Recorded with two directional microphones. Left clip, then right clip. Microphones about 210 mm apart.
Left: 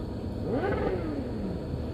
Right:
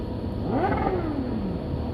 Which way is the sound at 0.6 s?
50° right (ahead or behind).